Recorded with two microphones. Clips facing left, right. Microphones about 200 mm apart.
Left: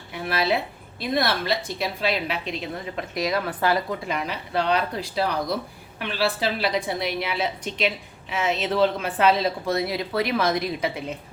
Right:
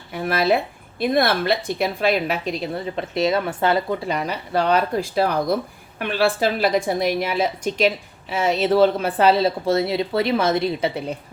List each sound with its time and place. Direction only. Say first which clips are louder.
0.1 s a woman's voice: right 5 dB; 50° right (ahead or behind); by 11.0 s 30° right (ahead or behind)